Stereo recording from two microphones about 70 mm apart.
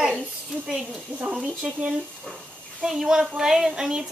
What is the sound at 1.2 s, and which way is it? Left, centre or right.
Speech, centre.